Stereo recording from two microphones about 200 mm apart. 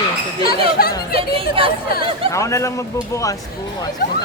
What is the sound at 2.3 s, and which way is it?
Speech, 15° left (ahead or behind).